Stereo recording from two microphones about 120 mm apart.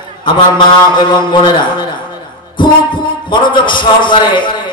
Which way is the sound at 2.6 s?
40° left (ahead or behind).